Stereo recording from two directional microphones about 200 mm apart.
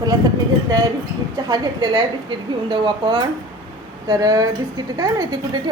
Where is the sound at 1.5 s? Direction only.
20° right (ahead or behind).